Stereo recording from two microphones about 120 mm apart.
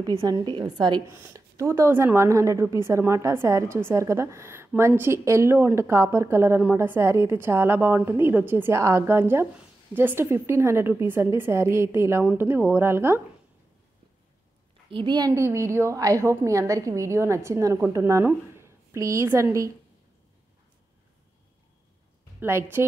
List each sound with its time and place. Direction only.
0.2 s a woman's voice: 40° right (ahead or behind)
1.0 s a woman's voice: 20° right (ahead or behind)
14.9 s a woman's voice: 40° right (ahead or behind)
15.3 s a woman's voice: 25° right (ahead or behind)
22.4 s a woman's voice: 20° right (ahead or behind)